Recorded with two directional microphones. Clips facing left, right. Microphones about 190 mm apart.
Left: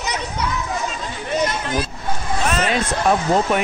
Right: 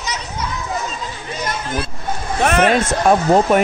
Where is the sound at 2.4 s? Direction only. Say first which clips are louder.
Right 7 dB; 60° right (ahead or behind).